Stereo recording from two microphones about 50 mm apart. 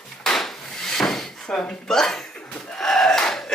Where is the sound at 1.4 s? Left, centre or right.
Left.